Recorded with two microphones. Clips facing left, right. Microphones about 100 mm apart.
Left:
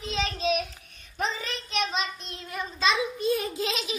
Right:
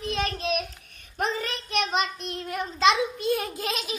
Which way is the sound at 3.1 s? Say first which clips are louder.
Even; 60° right (ahead or behind).